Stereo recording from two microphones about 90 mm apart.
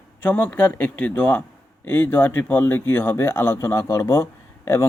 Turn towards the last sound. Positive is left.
turn(degrees=35)  # may be behind; listen again after turning